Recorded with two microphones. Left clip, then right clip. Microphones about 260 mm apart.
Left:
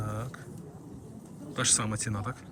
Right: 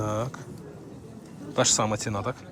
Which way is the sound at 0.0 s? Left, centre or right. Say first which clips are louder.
Right 10 dB; centre.